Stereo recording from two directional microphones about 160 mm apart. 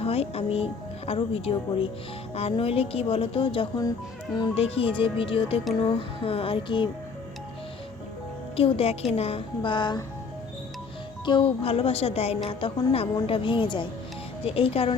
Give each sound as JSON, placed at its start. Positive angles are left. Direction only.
{"t": 0.0, "sound": "a woman's voice", "side_deg": 40}
{"t": 8.5, "sound": "a woman's voice", "side_deg": 35}
{"t": 11.3, "sound": "a woman's voice", "side_deg": 35}